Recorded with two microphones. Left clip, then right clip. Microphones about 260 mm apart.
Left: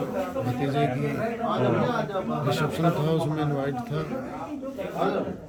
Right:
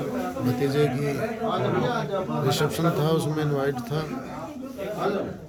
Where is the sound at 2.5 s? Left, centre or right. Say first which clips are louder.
Right 1 dB; centre.